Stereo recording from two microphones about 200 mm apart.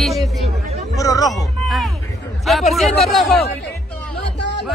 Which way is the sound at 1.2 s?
Centre (ahead or behind).